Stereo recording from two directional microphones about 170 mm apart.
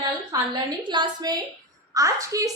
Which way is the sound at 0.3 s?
25° right (ahead or behind).